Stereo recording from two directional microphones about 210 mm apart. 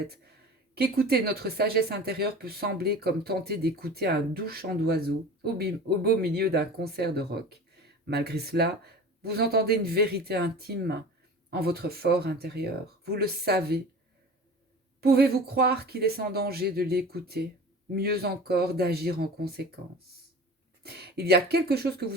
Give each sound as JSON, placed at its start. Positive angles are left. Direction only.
{"t": 0.8, "sound": "speech", "side_deg": -45}
{"t": 15.0, "sound": "speech", "side_deg": -45}
{"t": 20.8, "sound": "speech", "side_deg": -50}